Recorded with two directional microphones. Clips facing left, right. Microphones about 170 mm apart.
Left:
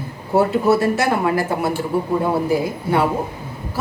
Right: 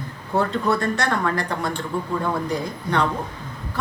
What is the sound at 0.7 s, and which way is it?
A woman's voice, 5° left (ahead or behind).